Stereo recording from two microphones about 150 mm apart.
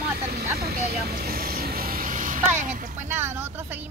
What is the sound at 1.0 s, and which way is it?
Vehicle, 90° right.